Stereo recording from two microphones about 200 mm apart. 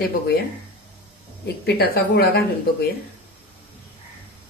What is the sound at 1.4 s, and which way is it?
Speech, 55° left (ahead or behind).